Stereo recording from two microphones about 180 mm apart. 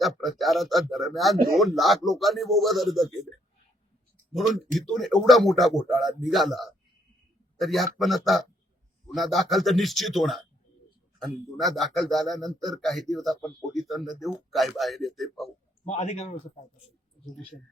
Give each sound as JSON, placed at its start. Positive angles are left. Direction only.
{"t": 0.0, "sound": "speech", "side_deg": 0}
{"t": 4.4, "sound": "speech", "side_deg": 0}
{"t": 15.8, "sound": "speech", "side_deg": 35}